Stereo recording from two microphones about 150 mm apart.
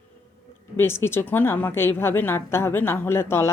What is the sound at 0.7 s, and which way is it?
A woman's voice, 15° left (ahead or behind).